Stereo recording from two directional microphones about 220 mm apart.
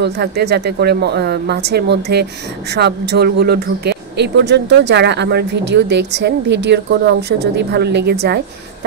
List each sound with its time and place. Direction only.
0.0 s speech: 50° right (ahead or behind)